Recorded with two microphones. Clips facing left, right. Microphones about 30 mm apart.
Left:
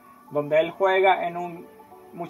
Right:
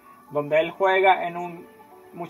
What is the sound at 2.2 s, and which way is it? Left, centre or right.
Speech, right.